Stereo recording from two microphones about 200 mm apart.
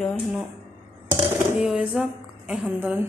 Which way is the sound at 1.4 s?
10° right (ahead or behind).